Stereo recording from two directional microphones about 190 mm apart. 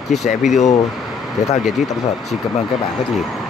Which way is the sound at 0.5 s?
40° left (ahead or behind).